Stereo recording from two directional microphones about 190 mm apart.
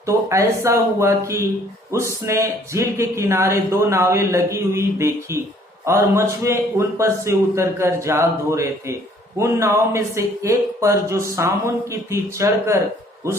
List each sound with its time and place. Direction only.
0.0 s speech: 15° right (ahead or behind)